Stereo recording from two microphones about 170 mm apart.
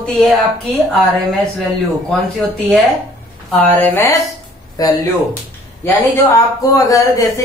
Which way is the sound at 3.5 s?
10° left (ahead or behind).